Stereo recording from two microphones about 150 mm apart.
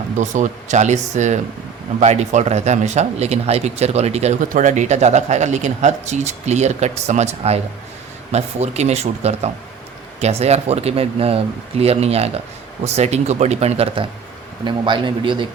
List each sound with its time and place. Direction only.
0.2 s a man's voice: 50° right (ahead or behind); by 15.4 s 35° right (ahead or behind)